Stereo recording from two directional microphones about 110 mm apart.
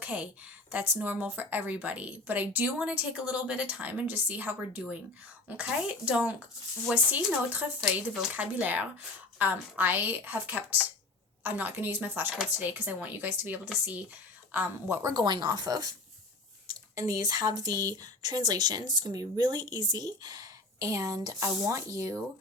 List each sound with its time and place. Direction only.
0.0 s a woman's voice: 15° right (ahead or behind)
8.3 s a woman's voice: 15° right (ahead or behind)
15.1 s speech: 40° right (ahead or behind)
16.9 s speech: 30° right (ahead or behind)